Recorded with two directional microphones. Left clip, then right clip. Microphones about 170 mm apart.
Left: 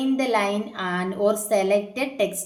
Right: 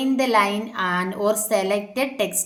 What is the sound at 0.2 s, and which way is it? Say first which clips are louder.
A woman's voice: right 6 dB; 25° right (ahead or behind).